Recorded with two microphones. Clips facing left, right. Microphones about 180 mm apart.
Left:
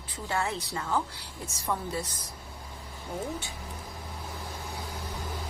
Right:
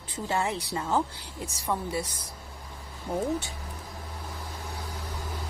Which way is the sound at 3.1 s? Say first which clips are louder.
Right 6 dB; 30° right (ahead or behind).